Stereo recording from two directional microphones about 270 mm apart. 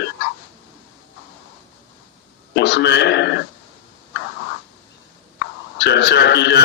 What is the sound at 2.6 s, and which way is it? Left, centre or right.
Speech, left.